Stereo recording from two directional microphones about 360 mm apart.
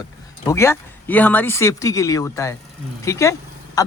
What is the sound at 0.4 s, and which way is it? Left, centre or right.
Speech, centre.